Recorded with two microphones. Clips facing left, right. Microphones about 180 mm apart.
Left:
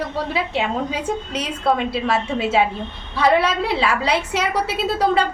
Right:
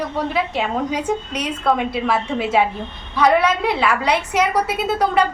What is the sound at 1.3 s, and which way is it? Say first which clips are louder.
Speech: left 1 dB; 30° left (ahead or behind).